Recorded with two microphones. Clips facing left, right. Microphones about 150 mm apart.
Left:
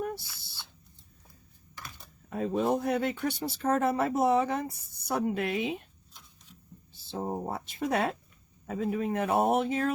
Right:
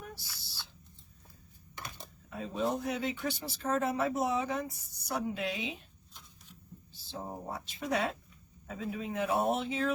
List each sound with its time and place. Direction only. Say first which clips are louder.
0.0 s owl: left 12 dB; 55° left (ahead or behind)
1.7 s a sound: right 2 dB; 20° right (ahead or behind)
2.3 s speech: left 6 dB; 55° left (ahead or behind)
6.9 s speech: left 8 dB; 55° left (ahead or behind)